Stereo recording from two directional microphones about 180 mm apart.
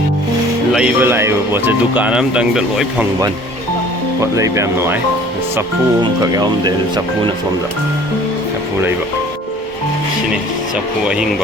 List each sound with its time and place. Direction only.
0.7 s speech: 5° right (ahead or behind)
4.2 s speech: 15° right (ahead or behind)
6.0 s speech: 25° right (ahead or behind)